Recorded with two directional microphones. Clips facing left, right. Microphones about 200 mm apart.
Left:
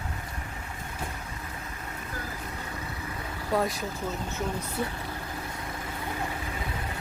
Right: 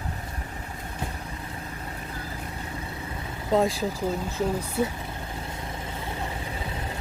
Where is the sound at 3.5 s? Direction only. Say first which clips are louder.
Right 5 dB; 25° right (ahead or behind).